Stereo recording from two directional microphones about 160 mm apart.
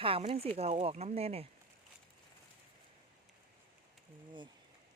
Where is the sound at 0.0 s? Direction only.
35° right (ahead or behind).